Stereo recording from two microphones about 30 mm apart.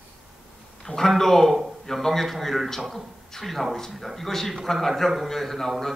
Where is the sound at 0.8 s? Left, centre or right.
Centre.